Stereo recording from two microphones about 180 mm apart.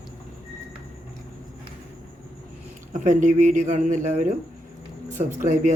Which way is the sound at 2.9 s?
40° right (ahead or behind).